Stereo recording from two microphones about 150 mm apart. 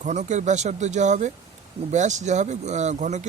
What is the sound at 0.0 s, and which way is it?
Speech, 50° right (ahead or behind).